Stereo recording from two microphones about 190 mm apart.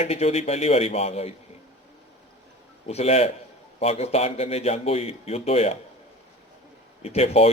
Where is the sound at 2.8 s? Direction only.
35° left (ahead or behind).